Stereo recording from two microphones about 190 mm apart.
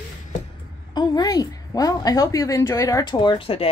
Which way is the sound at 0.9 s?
20° left (ahead or behind).